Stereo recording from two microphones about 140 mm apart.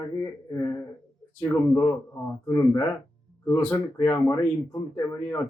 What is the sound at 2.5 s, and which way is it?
A man's voice, 20° left (ahead or behind).